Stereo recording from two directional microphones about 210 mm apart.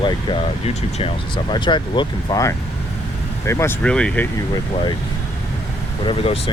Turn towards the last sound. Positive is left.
turn(degrees=30)  # may be behind; listen again after turning